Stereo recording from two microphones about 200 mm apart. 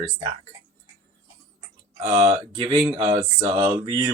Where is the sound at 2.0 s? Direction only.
20° right (ahead or behind).